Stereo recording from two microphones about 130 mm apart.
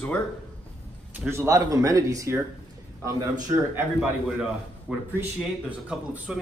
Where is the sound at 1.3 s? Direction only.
25° right (ahead or behind).